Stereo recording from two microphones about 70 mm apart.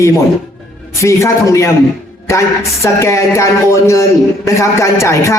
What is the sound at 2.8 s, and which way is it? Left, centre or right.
A man's voice, left.